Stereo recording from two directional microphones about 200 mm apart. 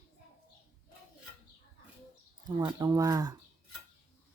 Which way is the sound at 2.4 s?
20° right (ahead or behind).